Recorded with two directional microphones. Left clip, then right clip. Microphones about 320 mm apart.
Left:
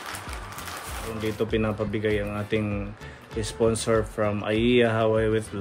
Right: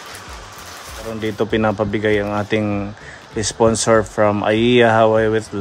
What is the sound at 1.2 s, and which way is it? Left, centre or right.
Speech, right.